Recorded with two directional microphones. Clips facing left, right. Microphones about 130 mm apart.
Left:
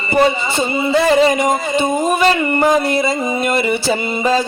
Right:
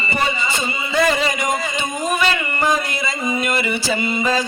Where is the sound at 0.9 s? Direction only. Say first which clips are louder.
Left 6 dB; 30° left (ahead or behind).